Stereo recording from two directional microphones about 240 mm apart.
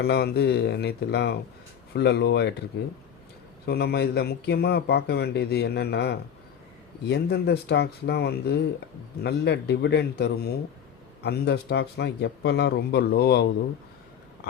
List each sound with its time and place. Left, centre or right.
0.0 s speech: left
3.7 s speech: left